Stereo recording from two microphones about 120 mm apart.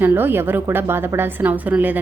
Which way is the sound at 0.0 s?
15° right (ahead or behind).